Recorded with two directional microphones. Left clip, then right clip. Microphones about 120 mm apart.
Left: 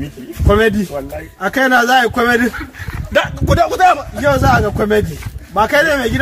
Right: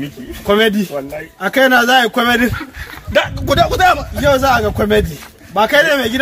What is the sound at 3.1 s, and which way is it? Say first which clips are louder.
Speech: even; 10° left (ahead or behind).